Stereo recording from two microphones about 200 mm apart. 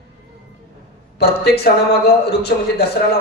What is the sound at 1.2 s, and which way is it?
A man's voice, 55° left (ahead or behind).